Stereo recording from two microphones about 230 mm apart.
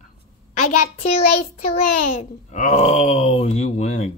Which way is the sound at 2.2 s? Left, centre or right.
Left.